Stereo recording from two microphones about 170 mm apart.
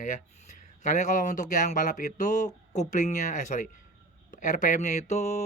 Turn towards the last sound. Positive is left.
turn(degrees=40)  # may be behind; listen again after turning